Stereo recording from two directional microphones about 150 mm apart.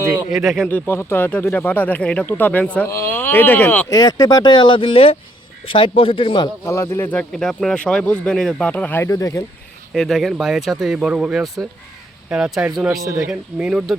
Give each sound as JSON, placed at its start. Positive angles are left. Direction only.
{"t": 0.0, "sound": "a sound", "side_deg": -15}
{"t": 0.3, "sound": "speech", "side_deg": 0}
{"t": 0.7, "sound": "speech", "side_deg": 15}
{"t": 3.8, "sound": "a man's voice", "side_deg": 25}
{"t": 6.7, "sound": "speech", "side_deg": 20}
{"t": 9.9, "sound": "speech", "side_deg": 0}
{"t": 13.0, "sound": "speech", "side_deg": -20}
{"t": 13.3, "sound": "speech", "side_deg": -10}